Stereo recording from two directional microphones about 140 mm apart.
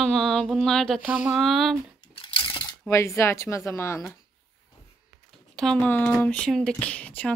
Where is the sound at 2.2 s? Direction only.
35° left (ahead or behind).